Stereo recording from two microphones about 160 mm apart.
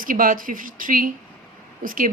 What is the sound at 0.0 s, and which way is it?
Speech, 60° right (ahead or behind).